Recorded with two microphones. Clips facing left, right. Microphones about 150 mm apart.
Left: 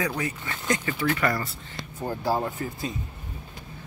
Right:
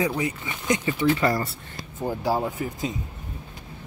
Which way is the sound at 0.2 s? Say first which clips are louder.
Right 3 dB; 20° right (ahead or behind).